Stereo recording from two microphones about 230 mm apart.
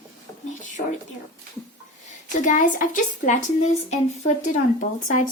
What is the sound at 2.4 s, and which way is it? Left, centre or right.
Speech, left.